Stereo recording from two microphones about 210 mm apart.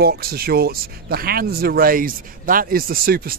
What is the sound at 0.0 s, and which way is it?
Speech, 45° right (ahead or behind).